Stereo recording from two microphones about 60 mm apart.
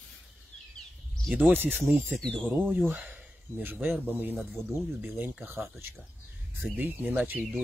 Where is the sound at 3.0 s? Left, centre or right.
Right.